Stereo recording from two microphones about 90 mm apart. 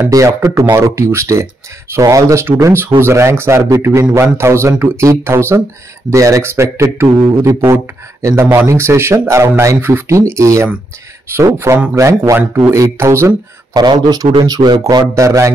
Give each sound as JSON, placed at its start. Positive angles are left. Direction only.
{"t": 0.1, "sound": "speech", "side_deg": -40}
{"t": 13.7, "sound": "speech", "side_deg": -50}